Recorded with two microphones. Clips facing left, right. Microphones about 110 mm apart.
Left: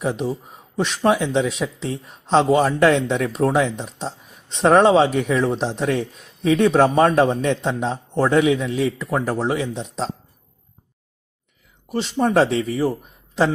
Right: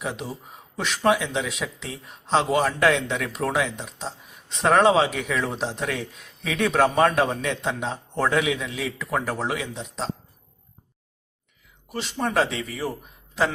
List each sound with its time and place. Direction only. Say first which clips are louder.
0.0 s speech: left 8 dB; 35° left (ahead or behind)
11.9 s speech: left 7 dB; 30° left (ahead or behind)